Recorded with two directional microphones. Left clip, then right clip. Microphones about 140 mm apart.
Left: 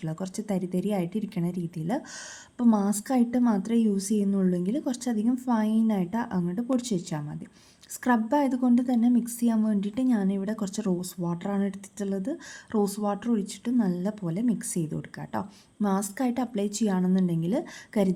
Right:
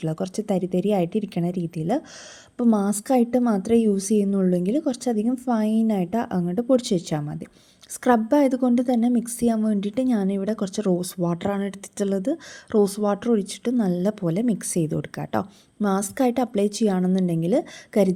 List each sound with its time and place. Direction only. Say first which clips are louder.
0.0 s a woman's voice: right 8 dB; 35° right (ahead or behind)